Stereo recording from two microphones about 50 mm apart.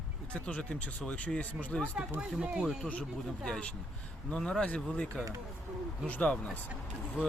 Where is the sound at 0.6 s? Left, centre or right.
Left.